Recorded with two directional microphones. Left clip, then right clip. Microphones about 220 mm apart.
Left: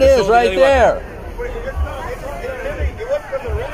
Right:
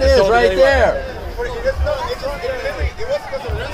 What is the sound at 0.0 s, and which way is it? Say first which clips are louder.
Speech: left 1 dB; 50° left (ahead or behind).